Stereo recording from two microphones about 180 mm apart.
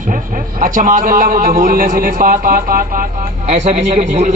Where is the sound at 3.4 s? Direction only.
40° right (ahead or behind).